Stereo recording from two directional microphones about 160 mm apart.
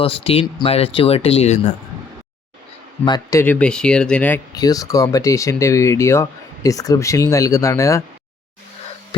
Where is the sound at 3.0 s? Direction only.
25° left (ahead or behind).